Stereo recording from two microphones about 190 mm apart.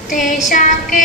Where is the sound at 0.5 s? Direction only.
45° left (ahead or behind).